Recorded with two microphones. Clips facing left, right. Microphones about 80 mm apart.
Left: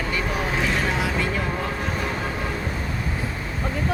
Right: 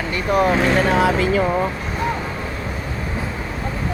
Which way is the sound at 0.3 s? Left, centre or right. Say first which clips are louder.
Right 12 dB; right.